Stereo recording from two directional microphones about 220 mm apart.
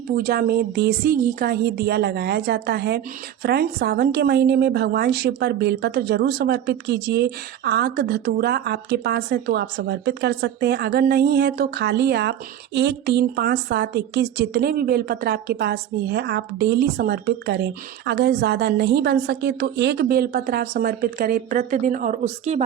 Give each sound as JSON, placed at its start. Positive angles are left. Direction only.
{"t": 0.2, "sound": "a woman's voice", "side_deg": -45}